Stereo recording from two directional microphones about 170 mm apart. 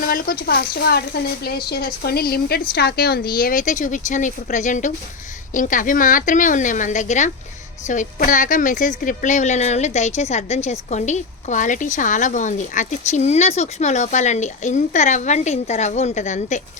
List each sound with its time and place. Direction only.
0.0 s a woman's voice: 60° left (ahead or behind); by 16.6 s 45° left (ahead or behind)